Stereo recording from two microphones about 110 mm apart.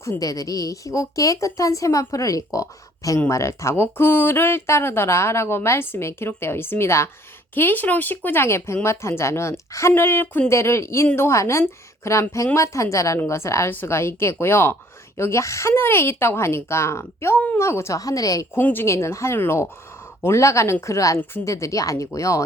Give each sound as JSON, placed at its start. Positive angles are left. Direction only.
{"t": 0.0, "sound": "a woman's voice", "side_deg": 30}
{"t": 18.6, "sound": "speech", "side_deg": 20}